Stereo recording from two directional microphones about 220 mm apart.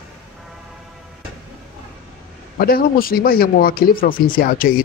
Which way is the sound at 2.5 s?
45° left (ahead or behind).